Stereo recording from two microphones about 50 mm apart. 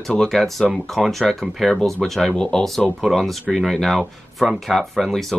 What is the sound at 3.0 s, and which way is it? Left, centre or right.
Speech, centre.